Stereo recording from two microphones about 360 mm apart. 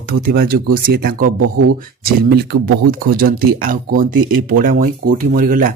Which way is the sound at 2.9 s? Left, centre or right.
Right.